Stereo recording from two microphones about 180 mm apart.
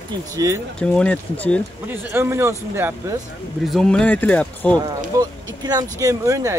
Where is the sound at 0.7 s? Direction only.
5° left (ahead or behind).